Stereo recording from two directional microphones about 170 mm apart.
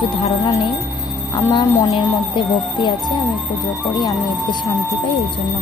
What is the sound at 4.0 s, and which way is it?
Speech, 20° left (ahead or behind).